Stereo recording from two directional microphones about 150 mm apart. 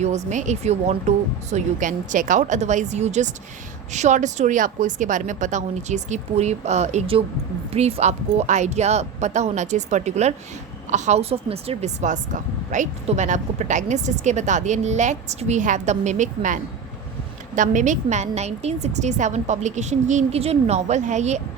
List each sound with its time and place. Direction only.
0.0 s speech: 50° right (ahead or behind)